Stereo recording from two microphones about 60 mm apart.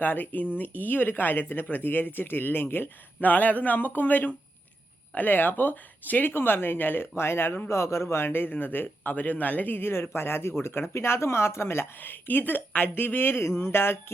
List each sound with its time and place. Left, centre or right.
0.0 s a man's voice: left
3.2 s a man's voice: left
13.6 s a sound: left